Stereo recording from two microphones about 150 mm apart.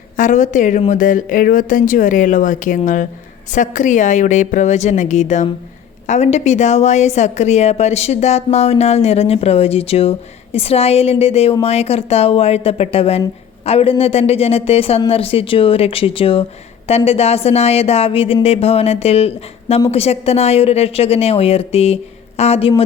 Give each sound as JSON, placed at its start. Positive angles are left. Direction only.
{"t": 0.2, "sound": "a woman's voice", "side_deg": 55}